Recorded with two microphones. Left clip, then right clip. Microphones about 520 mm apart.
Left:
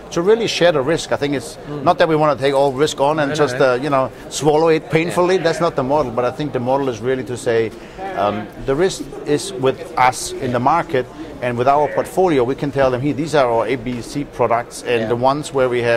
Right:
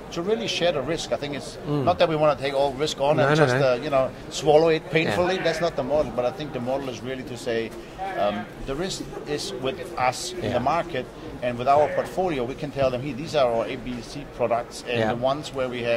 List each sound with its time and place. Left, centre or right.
0.1 s a man's voice: left